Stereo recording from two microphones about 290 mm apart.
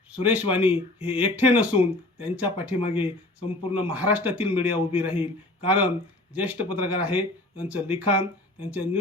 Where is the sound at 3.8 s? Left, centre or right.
Centre.